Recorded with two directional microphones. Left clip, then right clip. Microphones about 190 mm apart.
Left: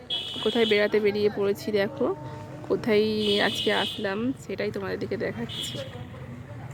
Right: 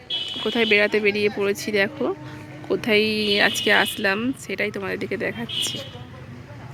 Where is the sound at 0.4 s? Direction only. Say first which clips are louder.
Right 4 dB; centre (ahead or behind).